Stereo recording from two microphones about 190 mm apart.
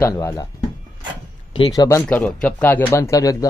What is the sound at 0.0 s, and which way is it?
Speech, 15° left (ahead or behind).